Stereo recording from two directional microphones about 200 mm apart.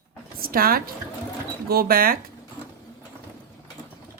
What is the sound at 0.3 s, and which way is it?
Speech, 50° right (ahead or behind).